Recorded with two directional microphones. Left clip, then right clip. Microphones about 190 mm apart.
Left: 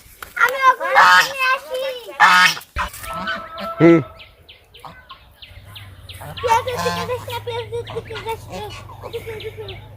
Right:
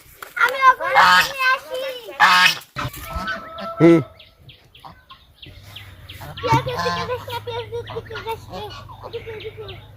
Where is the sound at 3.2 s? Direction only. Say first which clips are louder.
Left 1 dB; 30° left (ahead or behind).